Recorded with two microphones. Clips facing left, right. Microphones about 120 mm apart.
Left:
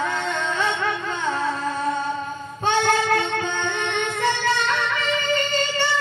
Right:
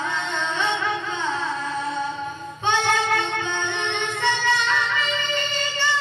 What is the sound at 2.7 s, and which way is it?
Music, 45° left (ahead or behind).